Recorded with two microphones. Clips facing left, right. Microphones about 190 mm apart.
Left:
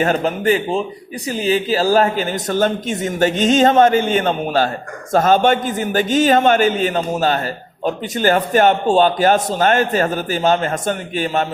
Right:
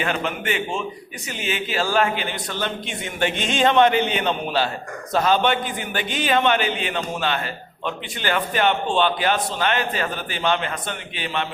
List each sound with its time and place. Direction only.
0.0 s a man's voice: 40° left (ahead or behind)